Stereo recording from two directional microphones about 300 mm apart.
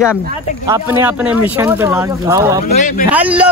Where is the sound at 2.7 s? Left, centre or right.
Left.